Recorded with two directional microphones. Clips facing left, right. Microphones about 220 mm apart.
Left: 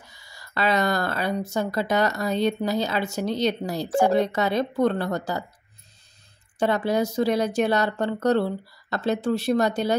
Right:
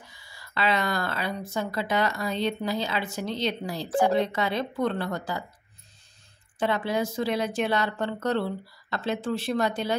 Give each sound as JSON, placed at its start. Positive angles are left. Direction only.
{"t": 0.3, "sound": "speech", "side_deg": 40}
{"t": 6.6, "sound": "speech", "side_deg": 40}